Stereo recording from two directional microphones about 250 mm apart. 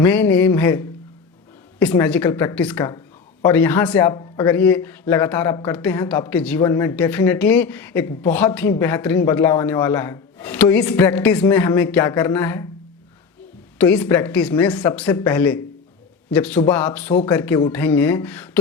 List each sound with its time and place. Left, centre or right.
0.0 s speech: centre
13.7 s a man's voice: centre